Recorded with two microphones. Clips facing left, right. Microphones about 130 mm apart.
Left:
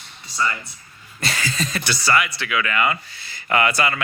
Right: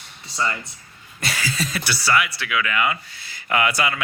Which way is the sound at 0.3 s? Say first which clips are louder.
Left 1 dB; 25° right (ahead or behind).